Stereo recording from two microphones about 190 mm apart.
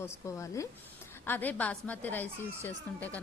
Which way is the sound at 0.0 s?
15° left (ahead or behind).